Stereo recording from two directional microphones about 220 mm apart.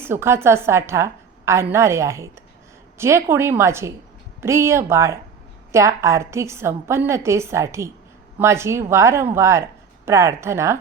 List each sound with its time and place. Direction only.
0.0 s a woman's voice: 10° right (ahead or behind)